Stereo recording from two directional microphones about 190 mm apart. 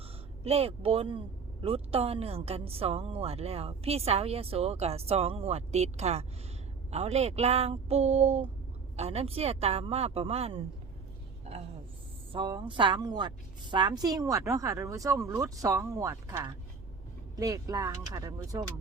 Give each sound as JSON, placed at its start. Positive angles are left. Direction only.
{"t": 0.4, "sound": "a woman's voice", "side_deg": -30}
{"t": 12.3, "sound": "a woman's voice", "side_deg": -25}